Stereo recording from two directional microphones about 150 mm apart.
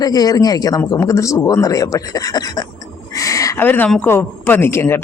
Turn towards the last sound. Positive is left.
turn(degrees=15)  # may be behind; listen again after turning